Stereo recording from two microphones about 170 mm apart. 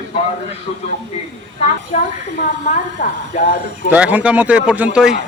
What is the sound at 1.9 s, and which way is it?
A woman's voice, 45° left (ahead or behind).